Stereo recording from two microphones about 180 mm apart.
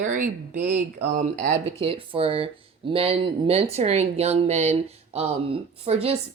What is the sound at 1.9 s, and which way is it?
Speech, 30° right (ahead or behind).